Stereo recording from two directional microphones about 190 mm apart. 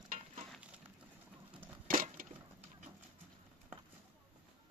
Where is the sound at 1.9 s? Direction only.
45° right (ahead or behind).